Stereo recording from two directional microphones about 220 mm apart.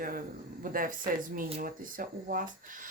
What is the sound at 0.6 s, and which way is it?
Speech, 40° right (ahead or behind).